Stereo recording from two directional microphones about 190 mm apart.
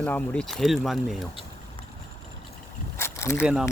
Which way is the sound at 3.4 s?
5° right (ahead or behind).